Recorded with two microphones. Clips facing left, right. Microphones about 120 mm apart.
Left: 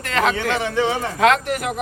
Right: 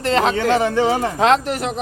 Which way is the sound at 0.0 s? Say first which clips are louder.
Right 3 dB; 30° right (ahead or behind).